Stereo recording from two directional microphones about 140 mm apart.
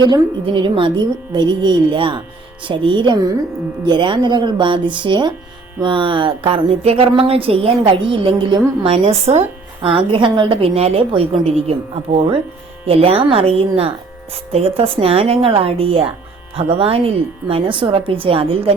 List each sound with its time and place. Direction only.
0.0 s a woman's voice: 30° right (ahead or behind)
12.8 s a woman's voice: 45° right (ahead or behind)